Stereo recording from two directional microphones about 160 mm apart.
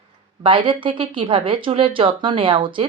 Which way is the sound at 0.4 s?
30° right (ahead or behind).